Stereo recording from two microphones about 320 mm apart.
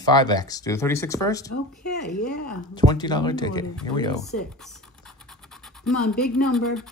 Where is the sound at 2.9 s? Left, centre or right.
Centre.